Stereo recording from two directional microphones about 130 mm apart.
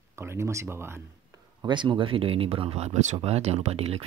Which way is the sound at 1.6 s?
35° right (ahead or behind).